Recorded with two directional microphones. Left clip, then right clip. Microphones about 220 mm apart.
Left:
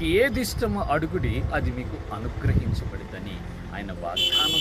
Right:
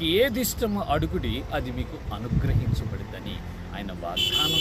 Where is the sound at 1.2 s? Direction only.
40° right (ahead or behind).